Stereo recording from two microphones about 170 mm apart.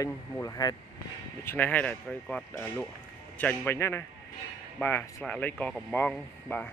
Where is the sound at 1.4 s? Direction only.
10° left (ahead or behind).